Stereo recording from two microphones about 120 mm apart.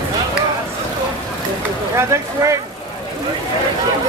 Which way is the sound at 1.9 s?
25° right (ahead or behind).